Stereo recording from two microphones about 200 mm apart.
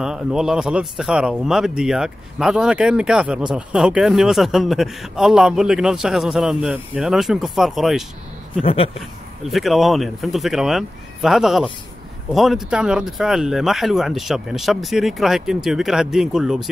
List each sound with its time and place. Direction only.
0.0 s speech: centre (ahead or behind)
8.6 s speech: 30° left (ahead or behind)
9.4 s speech: centre (ahead or behind)